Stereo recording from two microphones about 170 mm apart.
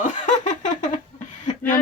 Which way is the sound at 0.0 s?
45° left (ahead or behind).